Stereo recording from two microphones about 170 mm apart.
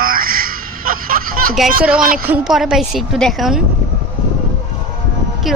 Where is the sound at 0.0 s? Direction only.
60° right (ahead or behind).